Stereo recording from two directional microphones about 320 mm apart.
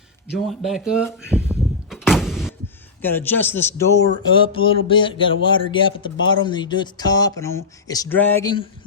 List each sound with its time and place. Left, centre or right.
0.3 s speech: centre
1.3 s a sound: centre
1.9 s door: centre
3.0 s speech: centre
6.1 s speech: left
6.4 s speech: centre